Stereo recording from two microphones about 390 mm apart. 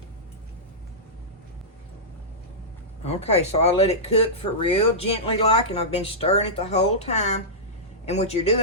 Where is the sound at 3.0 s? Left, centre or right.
Centre.